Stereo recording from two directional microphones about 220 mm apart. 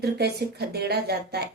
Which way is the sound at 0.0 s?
45° right (ahead or behind).